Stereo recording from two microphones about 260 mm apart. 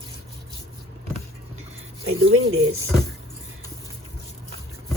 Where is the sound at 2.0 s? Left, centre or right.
Right.